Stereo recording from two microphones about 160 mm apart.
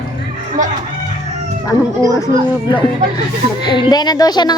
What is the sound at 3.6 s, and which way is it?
Speech, 30° left (ahead or behind).